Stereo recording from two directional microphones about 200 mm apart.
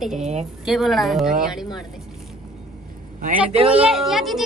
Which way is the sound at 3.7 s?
5° right (ahead or behind).